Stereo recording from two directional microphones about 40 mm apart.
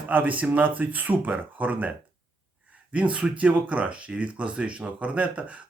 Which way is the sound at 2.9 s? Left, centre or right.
Right.